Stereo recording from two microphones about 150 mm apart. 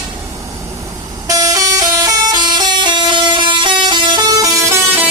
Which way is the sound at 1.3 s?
25° right (ahead or behind).